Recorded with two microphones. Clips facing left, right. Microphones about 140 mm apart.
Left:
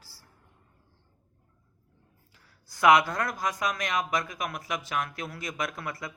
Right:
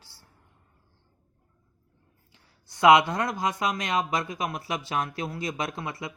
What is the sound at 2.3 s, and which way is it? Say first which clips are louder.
Speech: right 3 dB; 25° right (ahead or behind).